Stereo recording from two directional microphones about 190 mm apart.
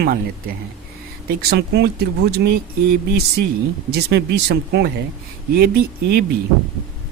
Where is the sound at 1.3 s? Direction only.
60° right (ahead or behind).